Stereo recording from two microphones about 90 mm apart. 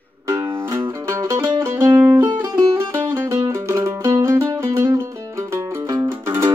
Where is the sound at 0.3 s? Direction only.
35° right (ahead or behind).